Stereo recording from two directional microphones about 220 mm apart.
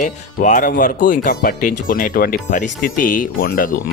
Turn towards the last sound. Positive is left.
turn(degrees=40)  # may be behind; listen again after turning